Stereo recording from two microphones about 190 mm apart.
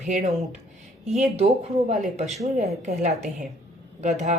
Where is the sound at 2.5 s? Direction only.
40° right (ahead or behind).